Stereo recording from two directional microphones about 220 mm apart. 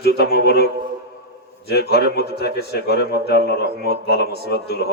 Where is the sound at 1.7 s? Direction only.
45° left (ahead or behind).